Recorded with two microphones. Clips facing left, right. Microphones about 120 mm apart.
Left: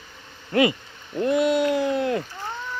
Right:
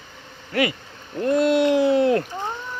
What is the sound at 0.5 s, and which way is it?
Hoot, 25° left (ahead or behind).